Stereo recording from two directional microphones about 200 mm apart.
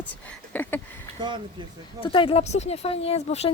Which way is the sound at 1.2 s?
25° right (ahead or behind).